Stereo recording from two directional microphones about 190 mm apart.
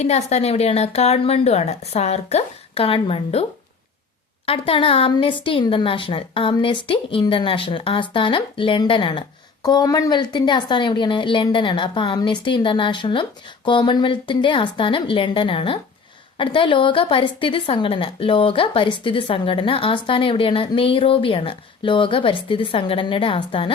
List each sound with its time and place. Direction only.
0.0 s a woman's voice: 35° left (ahead or behind)
4.4 s a woman's voice: 30° left (ahead or behind)